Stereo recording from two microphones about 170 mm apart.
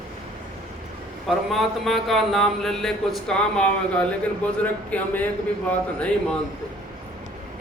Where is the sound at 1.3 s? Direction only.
Centre (ahead or behind).